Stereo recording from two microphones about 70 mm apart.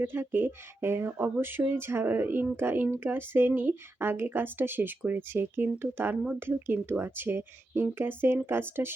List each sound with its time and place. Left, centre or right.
0.0 s speech: right